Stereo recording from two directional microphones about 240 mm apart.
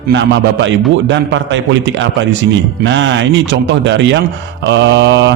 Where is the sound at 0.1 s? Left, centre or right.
Right.